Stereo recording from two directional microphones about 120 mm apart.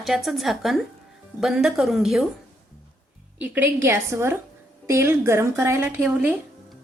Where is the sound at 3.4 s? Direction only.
15° right (ahead or behind).